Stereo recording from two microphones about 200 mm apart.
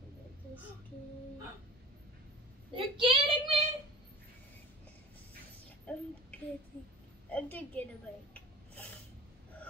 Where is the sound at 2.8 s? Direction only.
25° right (ahead or behind).